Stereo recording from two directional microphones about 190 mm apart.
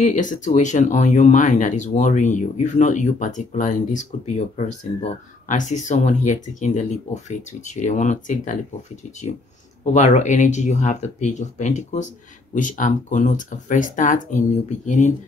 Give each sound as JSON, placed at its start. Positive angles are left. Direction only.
{"t": 0.0, "sound": "speech", "side_deg": 40}
{"t": 9.8, "sound": "speech", "side_deg": 35}